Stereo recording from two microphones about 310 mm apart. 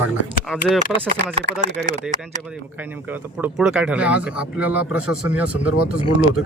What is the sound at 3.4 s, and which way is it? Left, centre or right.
Speech, centre.